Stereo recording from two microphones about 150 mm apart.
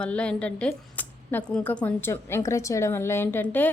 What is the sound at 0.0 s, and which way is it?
Speech, 5° left (ahead or behind).